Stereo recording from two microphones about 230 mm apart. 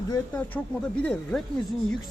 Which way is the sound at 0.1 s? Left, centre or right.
Centre.